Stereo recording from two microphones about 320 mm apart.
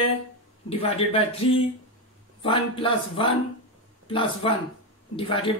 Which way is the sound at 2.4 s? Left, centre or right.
Centre.